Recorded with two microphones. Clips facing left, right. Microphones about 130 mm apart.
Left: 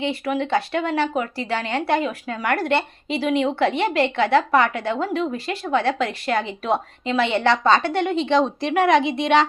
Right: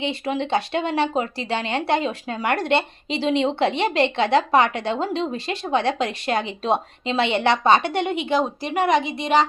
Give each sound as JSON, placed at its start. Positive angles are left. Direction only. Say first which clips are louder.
{"t": 0.0, "sound": "speech", "louder": "left 1 dB", "side_deg": -20}